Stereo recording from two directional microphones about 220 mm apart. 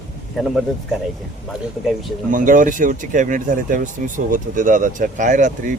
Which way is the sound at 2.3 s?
35° right (ahead or behind).